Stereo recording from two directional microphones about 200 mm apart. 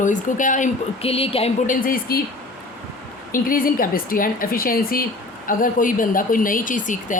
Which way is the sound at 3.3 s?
45° left (ahead or behind).